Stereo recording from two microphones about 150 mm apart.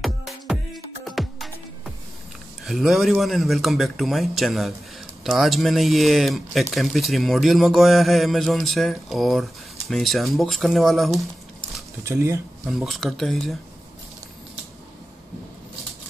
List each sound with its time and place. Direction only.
0.0 s music: centre (ahead or behind)
2.6 s speech: centre (ahead or behind)
12.0 s speech: 20° right (ahead or behind)
12.6 s speech: centre (ahead or behind)